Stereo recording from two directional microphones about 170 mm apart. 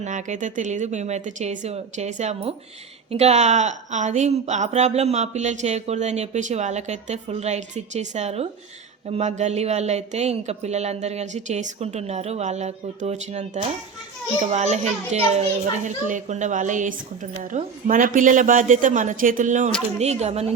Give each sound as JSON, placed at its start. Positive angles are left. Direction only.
{"t": 0.0, "sound": "a woman's voice", "side_deg": -45}